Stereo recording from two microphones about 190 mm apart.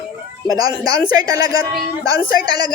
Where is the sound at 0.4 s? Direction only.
20° right (ahead or behind).